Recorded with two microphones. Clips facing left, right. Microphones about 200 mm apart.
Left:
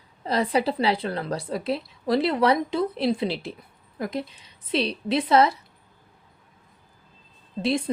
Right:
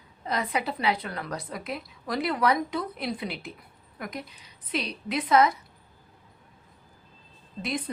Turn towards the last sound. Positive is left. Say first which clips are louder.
# left 7 dB
turn(degrees=30)  # may be behind; listen again after turning